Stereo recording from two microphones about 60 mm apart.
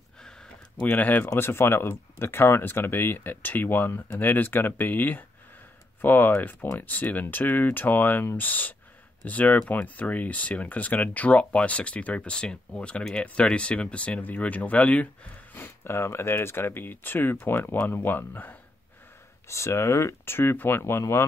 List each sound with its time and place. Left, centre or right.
0.9 s speech: left
15.5 s speech: left
19.4 s speech: left